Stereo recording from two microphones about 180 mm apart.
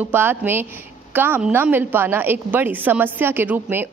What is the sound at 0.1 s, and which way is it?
A woman's voice, 10° right (ahead or behind).